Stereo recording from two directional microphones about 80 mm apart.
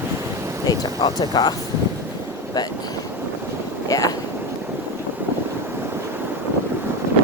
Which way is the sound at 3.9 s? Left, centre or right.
Left.